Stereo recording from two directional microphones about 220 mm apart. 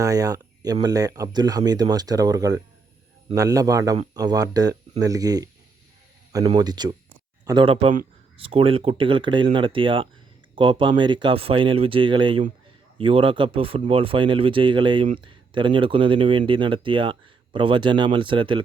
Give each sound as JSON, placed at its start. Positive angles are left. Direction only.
{"t": 0.0, "sound": "speech", "side_deg": -15}